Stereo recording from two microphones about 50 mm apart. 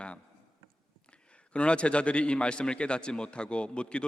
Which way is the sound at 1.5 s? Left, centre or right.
Left.